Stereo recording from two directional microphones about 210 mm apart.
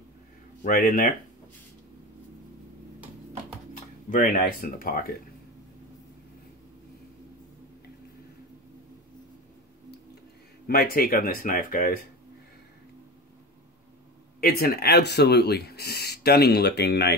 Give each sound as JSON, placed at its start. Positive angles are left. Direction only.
{"t": 0.7, "sound": "speech", "side_deg": 40}
{"t": 4.1, "sound": "speech", "side_deg": 40}
{"t": 10.7, "sound": "speech", "side_deg": 45}
{"t": 14.4, "sound": "speech", "side_deg": 45}